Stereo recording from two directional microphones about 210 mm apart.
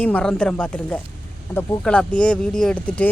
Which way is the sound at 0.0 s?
5° left (ahead or behind).